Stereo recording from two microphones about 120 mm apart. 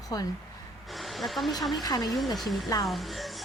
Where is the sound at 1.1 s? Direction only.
Centre (ahead or behind).